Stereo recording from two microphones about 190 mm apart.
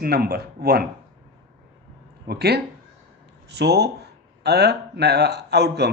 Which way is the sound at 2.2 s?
55° right (ahead or behind).